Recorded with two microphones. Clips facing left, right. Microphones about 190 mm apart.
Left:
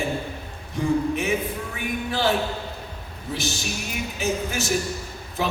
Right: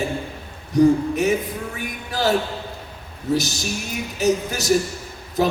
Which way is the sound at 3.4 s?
40° right (ahead or behind).